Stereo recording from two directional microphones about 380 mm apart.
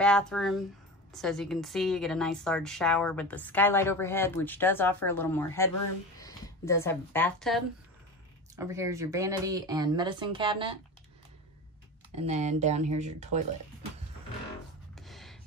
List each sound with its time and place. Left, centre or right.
0.0 s a woman's voice: centre
12.3 s speech: centre
15.0 s a sound: centre